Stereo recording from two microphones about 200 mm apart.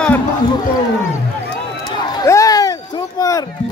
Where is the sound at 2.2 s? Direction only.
15° left (ahead or behind).